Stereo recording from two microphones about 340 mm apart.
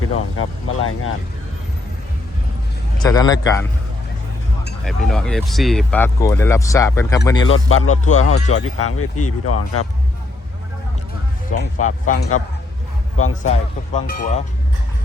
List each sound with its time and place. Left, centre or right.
0.0 s speech: left
3.0 s a man's voice: centre
4.9 s a man's voice: centre
7.5 s speech: left
11.5 s speech: left
13.4 s speech: left